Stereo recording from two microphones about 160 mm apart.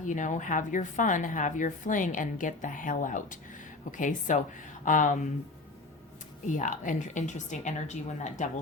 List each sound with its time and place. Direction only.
0.0 s a woman's voice: 50° left (ahead or behind)
6.5 s a woman's voice: 55° left (ahead or behind)